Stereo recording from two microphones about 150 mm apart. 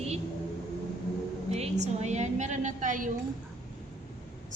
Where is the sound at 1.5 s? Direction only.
45° right (ahead or behind); by 3.1 s 60° right (ahead or behind).